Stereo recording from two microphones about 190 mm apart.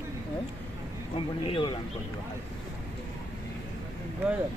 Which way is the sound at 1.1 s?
30° left (ahead or behind).